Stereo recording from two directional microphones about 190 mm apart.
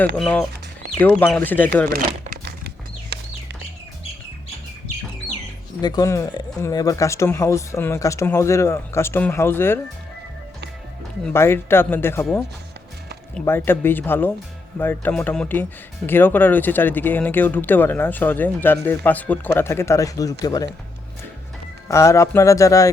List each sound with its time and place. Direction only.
0.2 s speech: 5° left (ahead or behind)
5.8 s speech: 20° left (ahead or behind)
11.2 s speech: 10° left (ahead or behind)
12.2 s speech: centre (ahead or behind)
13.4 s speech: 10° left (ahead or behind)
21.8 s speech: 15° left (ahead or behind)